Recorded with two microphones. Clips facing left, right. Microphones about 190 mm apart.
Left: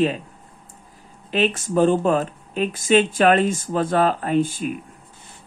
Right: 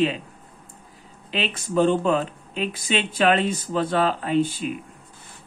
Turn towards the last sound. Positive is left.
turn(degrees=50)  # may be behind; listen again after turning